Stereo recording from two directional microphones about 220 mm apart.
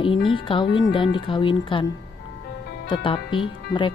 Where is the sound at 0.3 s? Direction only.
20° left (ahead or behind).